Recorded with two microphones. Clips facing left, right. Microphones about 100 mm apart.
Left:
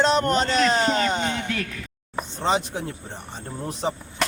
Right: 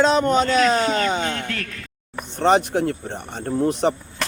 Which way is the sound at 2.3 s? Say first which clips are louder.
Right 7 dB; 65° right (ahead or behind).